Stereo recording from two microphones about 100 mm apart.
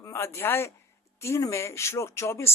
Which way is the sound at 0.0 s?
30° left (ahead or behind).